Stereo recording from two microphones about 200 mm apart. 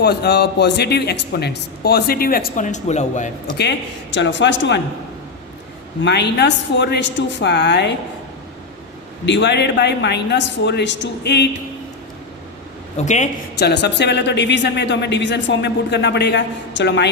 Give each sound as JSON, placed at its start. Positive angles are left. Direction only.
{"t": 0.0, "sound": "a man's voice", "side_deg": 55}
{"t": 3.6, "sound": "speech", "side_deg": 60}
{"t": 6.0, "sound": "speech", "side_deg": 55}
{"t": 9.2, "sound": "speech", "side_deg": 60}
{"t": 13.0, "sound": "a woman's voice", "side_deg": 35}
{"t": 13.6, "sound": "speech", "side_deg": 55}